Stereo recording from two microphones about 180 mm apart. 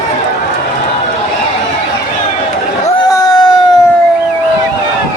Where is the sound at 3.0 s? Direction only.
20° left (ahead or behind).